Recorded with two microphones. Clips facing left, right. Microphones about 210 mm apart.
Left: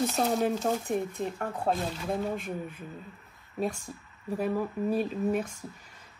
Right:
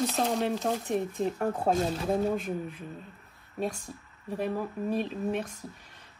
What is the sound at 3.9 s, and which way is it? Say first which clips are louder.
Speech: left 2 dB; 10° left (ahead or behind).